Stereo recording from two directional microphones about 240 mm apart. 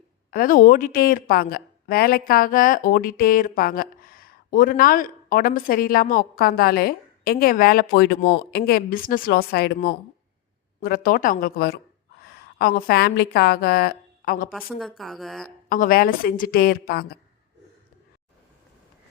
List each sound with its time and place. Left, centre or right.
0.3 s a woman's voice: left
14.5 s a woman's voice: centre
15.7 s a woman's voice: left